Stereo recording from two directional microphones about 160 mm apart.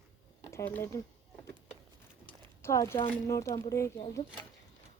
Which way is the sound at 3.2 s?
20° left (ahead or behind).